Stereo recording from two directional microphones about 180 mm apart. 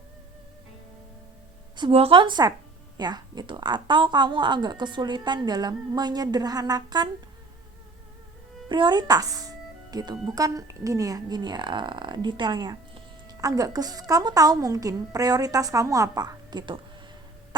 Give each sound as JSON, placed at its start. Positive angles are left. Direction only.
{"t": 1.7, "sound": "a woman's voice", "side_deg": -30}
{"t": 8.7, "sound": "a woman's voice", "side_deg": -25}